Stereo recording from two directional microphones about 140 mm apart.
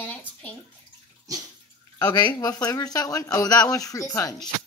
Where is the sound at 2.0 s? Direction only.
25° left (ahead or behind).